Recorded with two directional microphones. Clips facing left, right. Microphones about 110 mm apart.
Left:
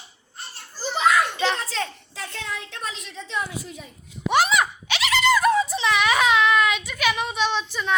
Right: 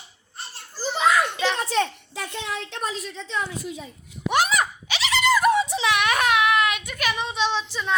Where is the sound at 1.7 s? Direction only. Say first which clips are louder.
Right 6 dB; 15° right (ahead or behind).